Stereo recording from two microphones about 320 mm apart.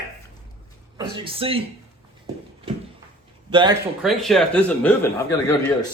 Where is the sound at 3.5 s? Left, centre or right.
Centre.